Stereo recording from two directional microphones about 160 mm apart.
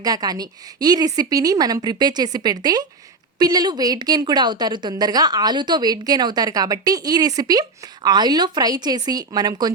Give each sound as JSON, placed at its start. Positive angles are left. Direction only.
{"t": 0.0, "sound": "a woman's voice", "side_deg": -25}